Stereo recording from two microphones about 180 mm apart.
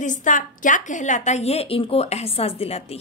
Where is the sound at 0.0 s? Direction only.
45° left (ahead or behind).